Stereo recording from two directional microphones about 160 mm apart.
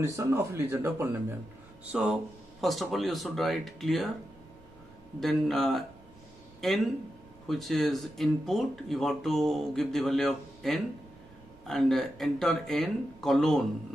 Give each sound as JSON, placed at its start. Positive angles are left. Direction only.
{"t": 0.0, "sound": "speech", "side_deg": -20}
{"t": 5.2, "sound": "speech", "side_deg": 0}